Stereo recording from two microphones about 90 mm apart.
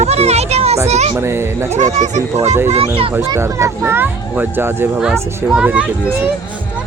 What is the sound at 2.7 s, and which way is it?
Speech, 90° right.